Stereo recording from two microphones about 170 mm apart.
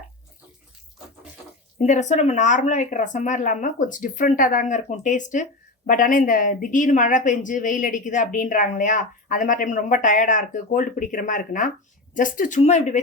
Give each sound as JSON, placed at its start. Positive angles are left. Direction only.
{"t": 1.8, "sound": "speech", "side_deg": 45}